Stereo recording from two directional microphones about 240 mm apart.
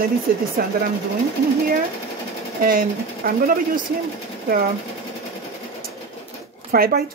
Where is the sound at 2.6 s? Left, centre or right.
Right.